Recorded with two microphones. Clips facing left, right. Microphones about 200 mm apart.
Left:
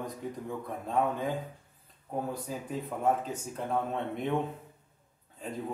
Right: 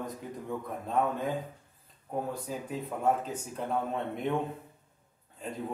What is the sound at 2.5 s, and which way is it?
Speech, centre (ahead or behind).